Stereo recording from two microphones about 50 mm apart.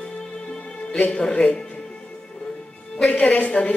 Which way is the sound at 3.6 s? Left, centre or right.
Centre.